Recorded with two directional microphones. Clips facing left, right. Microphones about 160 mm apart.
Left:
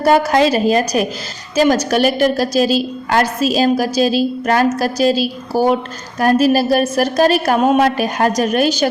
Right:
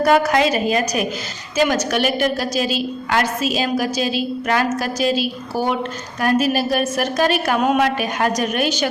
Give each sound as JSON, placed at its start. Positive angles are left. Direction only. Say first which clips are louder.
{"t": 0.0, "sound": "a woman's voice", "louder": "left 3 dB", "side_deg": 30}